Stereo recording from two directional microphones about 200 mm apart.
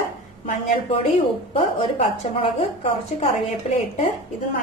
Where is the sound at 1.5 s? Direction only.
30° left (ahead or behind).